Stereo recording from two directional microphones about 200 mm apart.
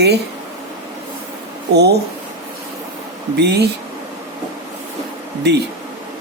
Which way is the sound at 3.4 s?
55° right (ahead or behind).